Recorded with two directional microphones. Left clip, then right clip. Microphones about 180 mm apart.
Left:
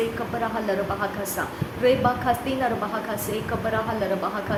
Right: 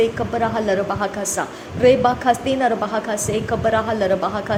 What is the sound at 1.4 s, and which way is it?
A woman's voice, 35° right (ahead or behind).